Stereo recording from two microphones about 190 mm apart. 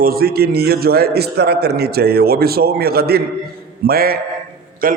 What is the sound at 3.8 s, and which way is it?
Mantra, 50° right (ahead or behind).